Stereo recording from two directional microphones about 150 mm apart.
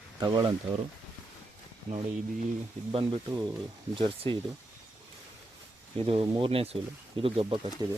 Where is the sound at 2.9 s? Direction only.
35° right (ahead or behind).